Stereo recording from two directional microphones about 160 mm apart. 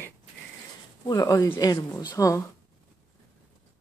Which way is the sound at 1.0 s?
20° left (ahead or behind).